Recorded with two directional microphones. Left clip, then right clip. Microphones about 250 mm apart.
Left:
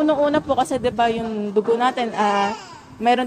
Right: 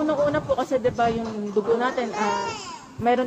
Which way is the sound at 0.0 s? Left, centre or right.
Left.